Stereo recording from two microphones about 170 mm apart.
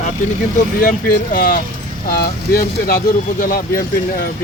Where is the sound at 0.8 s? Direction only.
55° left (ahead or behind).